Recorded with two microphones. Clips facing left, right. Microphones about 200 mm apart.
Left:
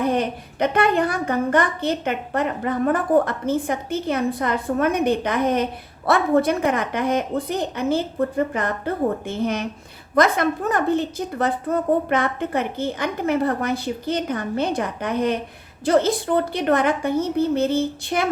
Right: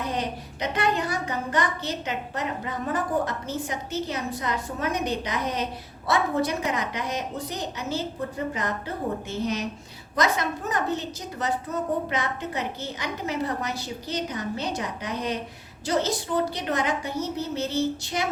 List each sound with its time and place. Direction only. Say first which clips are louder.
0.0 s a woman's voice: left 8 dB; 55° left (ahead or behind)